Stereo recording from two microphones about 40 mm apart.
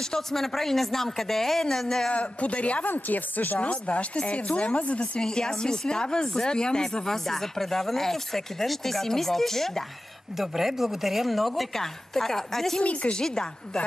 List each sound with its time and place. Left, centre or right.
0.1 s speech: centre
2.0 s speech: left
2.9 s speech: left
3.5 s speech: left
5.2 s speech: centre
10.3 s speech: centre
12.8 s speech: left
13.2 s speech: left